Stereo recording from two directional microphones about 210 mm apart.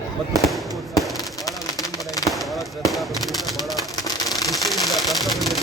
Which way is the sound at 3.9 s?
20° left (ahead or behind).